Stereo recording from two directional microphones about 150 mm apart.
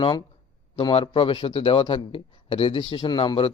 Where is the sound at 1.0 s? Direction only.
35° left (ahead or behind).